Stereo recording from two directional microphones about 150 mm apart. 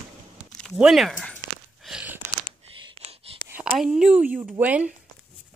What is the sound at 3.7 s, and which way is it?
A woman's voice, 5° right (ahead or behind).